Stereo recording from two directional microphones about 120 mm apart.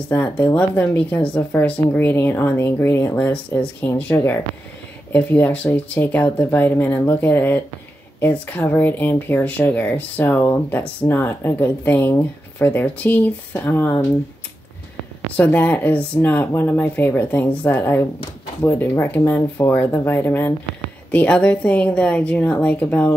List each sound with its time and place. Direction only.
0.1 s speech: 15° left (ahead or behind)
15.3 s speech: 15° left (ahead or behind)